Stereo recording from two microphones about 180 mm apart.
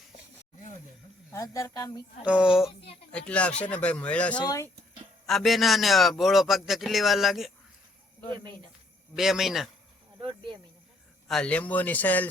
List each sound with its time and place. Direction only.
1.3 s speech: 15° left (ahead or behind)
2.2 s a man's voice: 5° right (ahead or behind)
4.4 s speech: 20° left (ahead or behind)
5.2 s a man's voice: centre (ahead or behind)
9.1 s a man's voice: centre (ahead or behind)
10.2 s cricket: 25° right (ahead or behind)
11.3 s speech: 5° left (ahead or behind)